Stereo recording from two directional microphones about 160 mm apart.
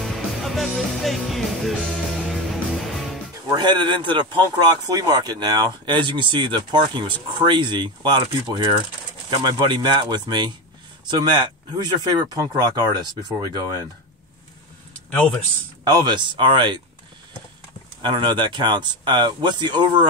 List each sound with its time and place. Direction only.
0.0 s music: centre (ahead or behind)
3.5 s speech: 30° right (ahead or behind)
15.8 s speech: 30° right (ahead or behind)
18.0 s speech: 30° right (ahead or behind)